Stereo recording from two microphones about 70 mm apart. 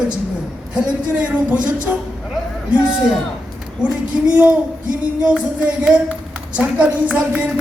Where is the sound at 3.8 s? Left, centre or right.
Centre.